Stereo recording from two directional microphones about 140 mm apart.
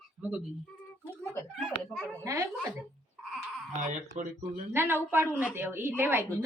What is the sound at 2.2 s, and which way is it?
Speech, 20° right (ahead or behind).